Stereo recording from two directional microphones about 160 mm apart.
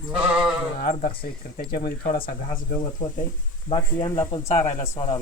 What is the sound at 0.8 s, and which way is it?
Speech, 65° left (ahead or behind).